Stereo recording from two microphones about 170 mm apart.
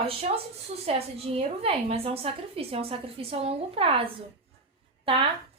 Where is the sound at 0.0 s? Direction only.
35° right (ahead or behind).